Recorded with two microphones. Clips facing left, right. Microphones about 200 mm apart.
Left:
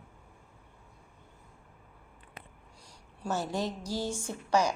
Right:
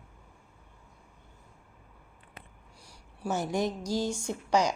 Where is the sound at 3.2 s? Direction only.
15° right (ahead or behind).